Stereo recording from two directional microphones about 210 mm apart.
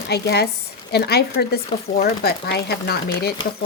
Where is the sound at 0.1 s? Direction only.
50° left (ahead or behind).